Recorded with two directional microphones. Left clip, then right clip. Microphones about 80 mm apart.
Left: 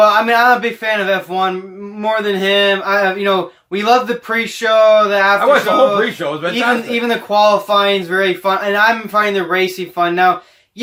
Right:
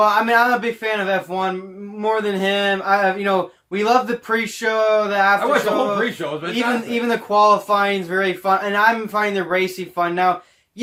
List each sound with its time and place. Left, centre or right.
0.0 s speech: right